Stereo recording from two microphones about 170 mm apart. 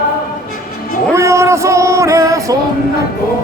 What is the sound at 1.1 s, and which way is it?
Music, 15° right (ahead or behind).